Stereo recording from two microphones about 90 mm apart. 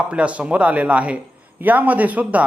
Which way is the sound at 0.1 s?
15° right (ahead or behind).